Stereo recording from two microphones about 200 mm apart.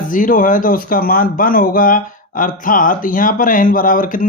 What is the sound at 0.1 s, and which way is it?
Speech, 40° left (ahead or behind).